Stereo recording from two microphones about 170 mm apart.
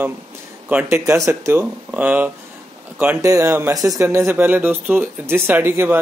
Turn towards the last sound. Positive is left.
turn(degrees=-15)  # may be behind; listen again after turning